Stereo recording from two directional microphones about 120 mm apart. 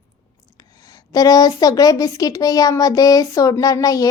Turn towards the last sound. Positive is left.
turn(degrees=30)  # may be behind; listen again after turning